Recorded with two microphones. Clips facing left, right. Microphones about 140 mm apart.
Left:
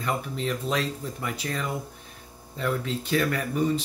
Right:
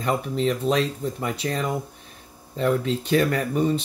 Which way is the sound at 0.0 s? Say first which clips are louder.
Right 6 dB; 25° right (ahead or behind).